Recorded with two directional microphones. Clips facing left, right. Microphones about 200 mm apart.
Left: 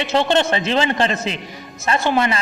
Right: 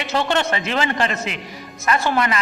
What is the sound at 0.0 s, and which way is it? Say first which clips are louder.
A man's voice: left 4 dB; 25° left (ahead or behind).